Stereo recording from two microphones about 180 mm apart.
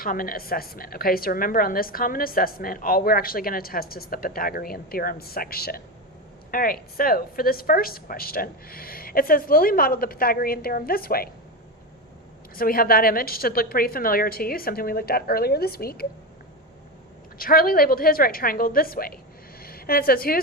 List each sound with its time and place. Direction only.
0.0 s a woman's voice: 50° left (ahead or behind)
12.5 s a woman's voice: 55° left (ahead or behind)
17.3 s a woman's voice: 55° left (ahead or behind)